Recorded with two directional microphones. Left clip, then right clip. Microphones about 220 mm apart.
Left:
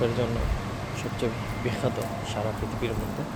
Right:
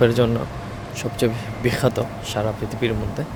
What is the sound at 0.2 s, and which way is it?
A man's voice, 60° right (ahead or behind).